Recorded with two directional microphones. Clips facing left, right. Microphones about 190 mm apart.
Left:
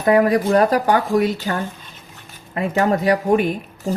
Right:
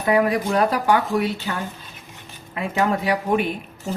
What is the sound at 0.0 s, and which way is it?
Speech, 45° left (ahead or behind).